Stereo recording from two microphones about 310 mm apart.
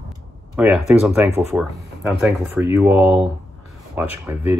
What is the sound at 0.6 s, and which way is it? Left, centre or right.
Speech, centre.